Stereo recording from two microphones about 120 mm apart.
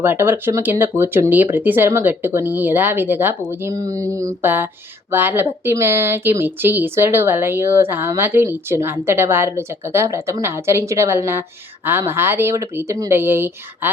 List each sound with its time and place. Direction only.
0.0 s speech: 20° right (ahead or behind)